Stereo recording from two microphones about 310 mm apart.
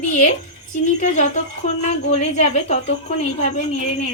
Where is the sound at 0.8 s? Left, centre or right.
Left.